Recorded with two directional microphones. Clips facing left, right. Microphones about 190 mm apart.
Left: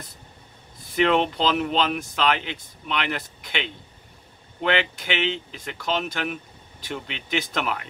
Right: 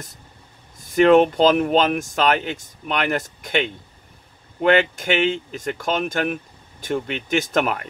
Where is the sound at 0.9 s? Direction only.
45° right (ahead or behind).